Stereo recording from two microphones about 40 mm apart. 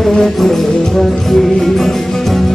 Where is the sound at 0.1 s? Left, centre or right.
Centre.